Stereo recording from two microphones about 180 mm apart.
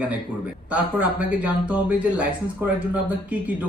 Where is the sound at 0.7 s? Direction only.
10° right (ahead or behind).